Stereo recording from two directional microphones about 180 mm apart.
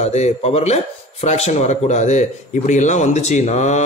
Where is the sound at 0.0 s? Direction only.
40° left (ahead or behind).